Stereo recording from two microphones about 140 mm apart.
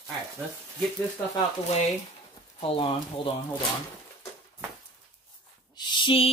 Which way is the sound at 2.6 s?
40° left (ahead or behind).